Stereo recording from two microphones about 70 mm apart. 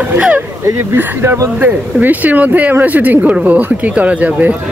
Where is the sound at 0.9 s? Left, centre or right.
Right.